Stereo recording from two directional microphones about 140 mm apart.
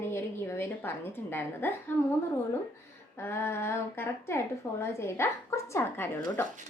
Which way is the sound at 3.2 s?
15° left (ahead or behind).